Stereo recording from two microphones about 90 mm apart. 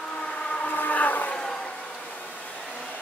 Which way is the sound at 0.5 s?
15° left (ahead or behind).